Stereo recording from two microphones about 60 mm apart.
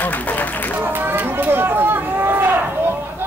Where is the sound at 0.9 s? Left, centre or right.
Right.